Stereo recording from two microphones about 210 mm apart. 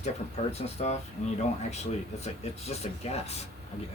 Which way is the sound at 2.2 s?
30° left (ahead or behind).